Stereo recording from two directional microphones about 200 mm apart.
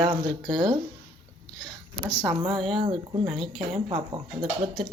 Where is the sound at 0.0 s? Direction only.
20° right (ahead or behind).